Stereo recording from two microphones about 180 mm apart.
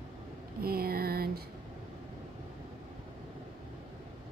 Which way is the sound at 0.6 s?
55° right (ahead or behind).